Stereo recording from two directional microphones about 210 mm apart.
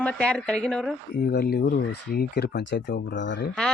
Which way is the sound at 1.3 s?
45° left (ahead or behind).